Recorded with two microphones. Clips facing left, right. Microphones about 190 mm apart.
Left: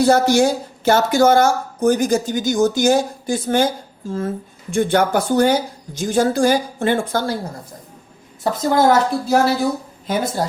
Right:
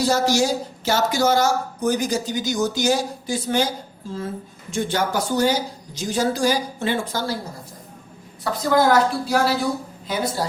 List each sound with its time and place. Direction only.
0.0 s speech: 55° left (ahead or behind)
8.7 s speech: 25° left (ahead or behind)
10.1 s speech: 50° left (ahead or behind)